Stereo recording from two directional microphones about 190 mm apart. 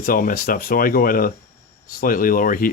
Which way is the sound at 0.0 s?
45° left (ahead or behind).